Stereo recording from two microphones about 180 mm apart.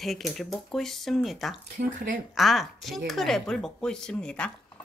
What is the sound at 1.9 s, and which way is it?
Speech, 45° right (ahead or behind).